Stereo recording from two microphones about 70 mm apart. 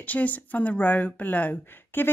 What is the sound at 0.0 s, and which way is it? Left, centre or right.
Speech, left.